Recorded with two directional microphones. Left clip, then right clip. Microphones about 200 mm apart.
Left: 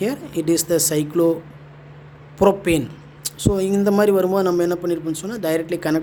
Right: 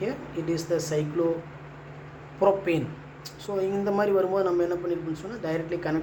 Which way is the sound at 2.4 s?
60° left (ahead or behind).